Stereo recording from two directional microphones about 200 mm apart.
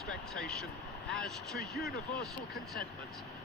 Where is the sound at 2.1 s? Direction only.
50° left (ahead or behind).